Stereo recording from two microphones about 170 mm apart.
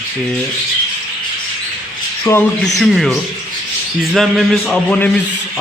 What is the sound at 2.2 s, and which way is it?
Speech, 15° left (ahead or behind).